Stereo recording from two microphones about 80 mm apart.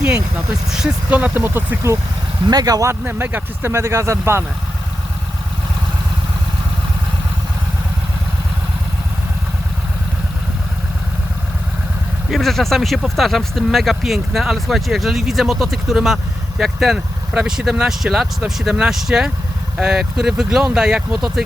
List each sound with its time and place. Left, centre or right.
0.7 s speech: centre; by 1.9 s right
2.5 s speech: right
3.0 s speech: right
12.3 s speech: centre